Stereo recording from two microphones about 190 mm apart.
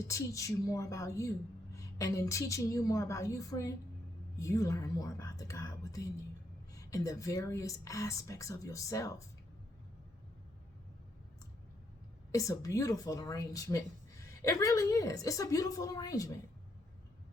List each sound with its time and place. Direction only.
0.1 s speech: 15° left (ahead or behind)
12.3 s speech: 15° left (ahead or behind)